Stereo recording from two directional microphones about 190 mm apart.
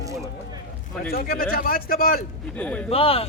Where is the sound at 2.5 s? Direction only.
5° left (ahead or behind).